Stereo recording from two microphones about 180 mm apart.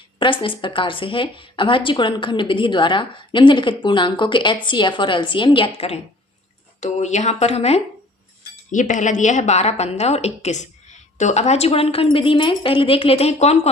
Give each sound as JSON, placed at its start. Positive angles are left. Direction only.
{"t": 0.2, "sound": "a woman's voice", "side_deg": 30}